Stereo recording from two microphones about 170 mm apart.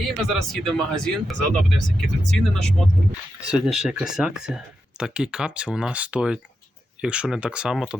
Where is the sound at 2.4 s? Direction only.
5° left (ahead or behind).